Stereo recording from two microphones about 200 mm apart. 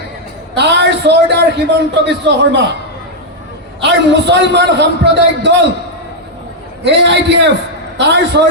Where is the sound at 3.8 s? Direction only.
60° right (ahead or behind).